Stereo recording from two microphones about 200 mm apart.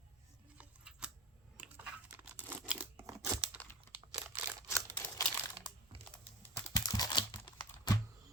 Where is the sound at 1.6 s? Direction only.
5° right (ahead or behind).